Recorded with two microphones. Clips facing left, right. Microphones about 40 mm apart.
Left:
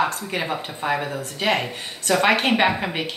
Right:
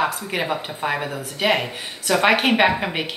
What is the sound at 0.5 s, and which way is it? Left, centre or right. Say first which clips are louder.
Speech: right 1 dB; centre.